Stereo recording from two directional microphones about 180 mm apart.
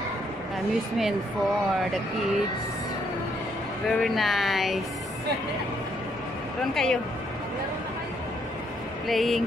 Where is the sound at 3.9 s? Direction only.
Centre (ahead or behind).